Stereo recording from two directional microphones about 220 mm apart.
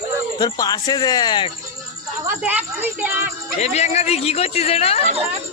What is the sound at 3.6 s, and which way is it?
Speech, 30° left (ahead or behind).